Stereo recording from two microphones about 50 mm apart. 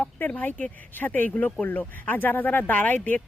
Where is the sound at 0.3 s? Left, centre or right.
Left.